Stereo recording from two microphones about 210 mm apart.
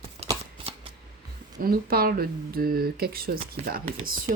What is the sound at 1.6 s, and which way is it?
Speech, 45° right (ahead or behind).